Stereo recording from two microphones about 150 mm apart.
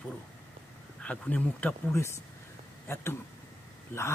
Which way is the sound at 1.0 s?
10° left (ahead or behind).